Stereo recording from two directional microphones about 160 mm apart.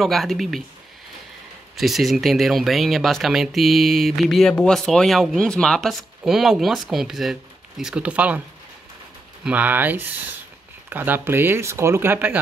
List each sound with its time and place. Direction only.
0.0 s speech: centre (ahead or behind)
1.8 s speech: centre (ahead or behind)
9.4 s speech: 10° right (ahead or behind)